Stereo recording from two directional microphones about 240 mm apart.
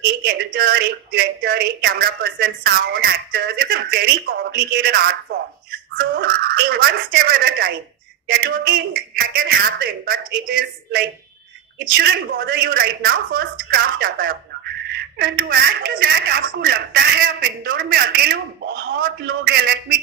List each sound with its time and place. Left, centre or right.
0.5 s a woman's voice: right
11.9 s a woman's voice: right